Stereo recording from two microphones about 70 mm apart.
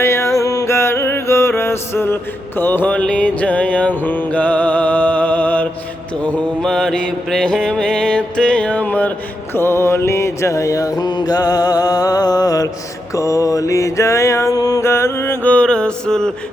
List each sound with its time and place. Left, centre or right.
0.0 s music: left
2.6 s mantra: left
9.6 s mantra: left
13.1 s mantra: left
15.4 s mantra: centre